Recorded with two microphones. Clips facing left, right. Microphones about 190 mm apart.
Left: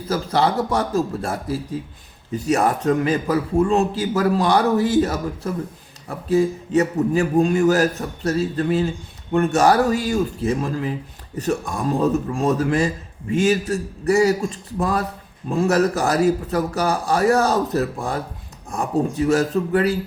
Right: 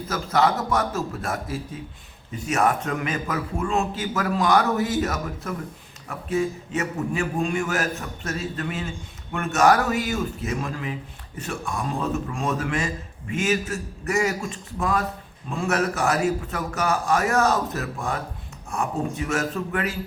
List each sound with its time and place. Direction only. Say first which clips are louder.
0.1 s a man's voice: left 2 dB; 30° left (ahead or behind)